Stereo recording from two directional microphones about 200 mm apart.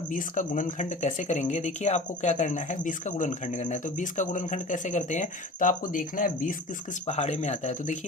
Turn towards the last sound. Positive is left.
turn(degrees=35)  # may be behind; listen again after turning